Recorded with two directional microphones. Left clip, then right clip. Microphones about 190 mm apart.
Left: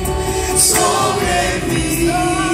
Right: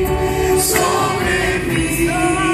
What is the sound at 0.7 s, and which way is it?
Music, 65° left (ahead or behind).